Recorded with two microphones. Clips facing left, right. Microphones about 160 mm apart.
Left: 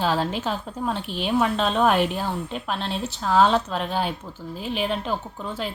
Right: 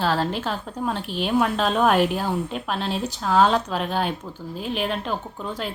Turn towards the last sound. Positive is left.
turn(degrees=0)  # may be behind; listen again after turning